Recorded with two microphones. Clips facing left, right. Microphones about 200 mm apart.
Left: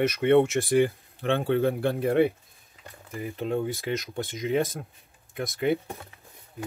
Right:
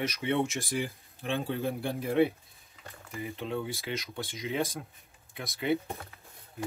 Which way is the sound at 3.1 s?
45° left (ahead or behind).